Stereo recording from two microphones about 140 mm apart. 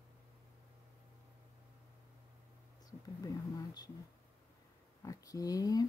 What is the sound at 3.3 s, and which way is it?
Speech, 25° left (ahead or behind).